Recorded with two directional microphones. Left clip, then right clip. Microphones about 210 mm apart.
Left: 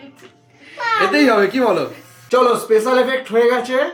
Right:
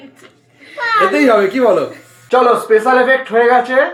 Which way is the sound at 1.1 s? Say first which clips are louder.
Right 3 dB; 10° left (ahead or behind).